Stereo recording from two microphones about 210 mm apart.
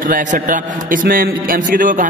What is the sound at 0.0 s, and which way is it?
A man's voice, 40° right (ahead or behind).